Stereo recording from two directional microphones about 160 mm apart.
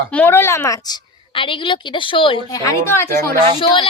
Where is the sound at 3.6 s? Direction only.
30° left (ahead or behind).